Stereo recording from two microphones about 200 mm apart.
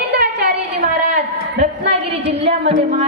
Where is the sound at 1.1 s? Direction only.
35° right (ahead or behind).